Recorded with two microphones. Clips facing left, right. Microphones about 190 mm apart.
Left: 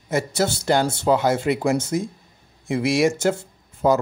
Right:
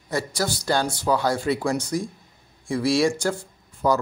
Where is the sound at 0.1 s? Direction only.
25° left (ahead or behind).